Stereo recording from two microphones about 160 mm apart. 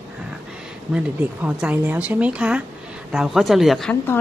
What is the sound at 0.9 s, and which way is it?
A woman's voice, 10° right (ahead or behind).